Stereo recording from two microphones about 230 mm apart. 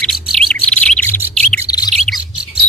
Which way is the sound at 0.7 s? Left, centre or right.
Centre.